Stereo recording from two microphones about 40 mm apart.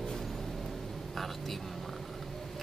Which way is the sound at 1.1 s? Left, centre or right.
Centre.